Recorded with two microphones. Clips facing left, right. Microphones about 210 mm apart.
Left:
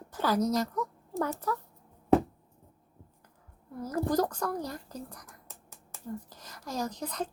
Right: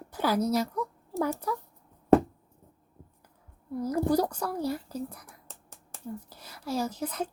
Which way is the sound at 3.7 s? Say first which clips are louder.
Right 3 dB; 10° right (ahead or behind).